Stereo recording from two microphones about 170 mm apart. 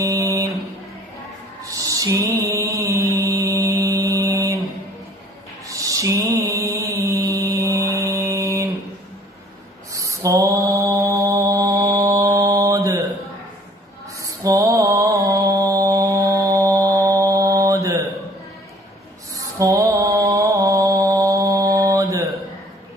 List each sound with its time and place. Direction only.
0.0 s a sound: 20° right (ahead or behind)
1.6 s a sound: 20° right (ahead or behind)
2.5 s mantra: 20° right (ahead or behind)
5.7 s mantra: 20° right (ahead or behind)
9.9 s mantra: 20° right (ahead or behind)
14.2 s mantra: 20° right (ahead or behind)
19.3 s mantra: 20° right (ahead or behind)